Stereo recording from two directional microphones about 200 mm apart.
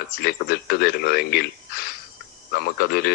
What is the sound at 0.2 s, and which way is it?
Speech, 50° left (ahead or behind).